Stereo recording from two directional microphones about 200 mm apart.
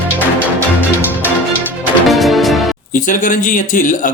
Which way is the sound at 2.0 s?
Centre (ahead or behind).